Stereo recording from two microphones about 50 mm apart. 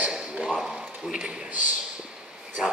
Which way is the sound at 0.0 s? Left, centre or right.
Centre.